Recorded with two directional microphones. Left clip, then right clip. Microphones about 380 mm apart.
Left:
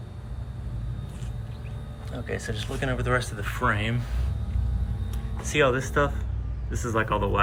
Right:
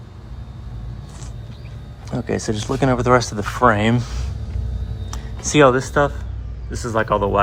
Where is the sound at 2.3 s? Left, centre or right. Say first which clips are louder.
Right 10 dB; right.